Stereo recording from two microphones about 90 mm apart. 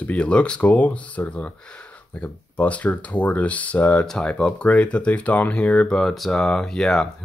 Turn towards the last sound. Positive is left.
turn(degrees=5)  # may be behind; listen again after turning